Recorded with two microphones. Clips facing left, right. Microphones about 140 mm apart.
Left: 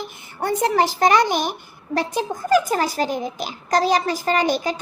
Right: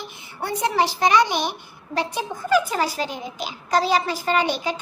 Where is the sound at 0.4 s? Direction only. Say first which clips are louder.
Left 3 dB; 45° left (ahead or behind).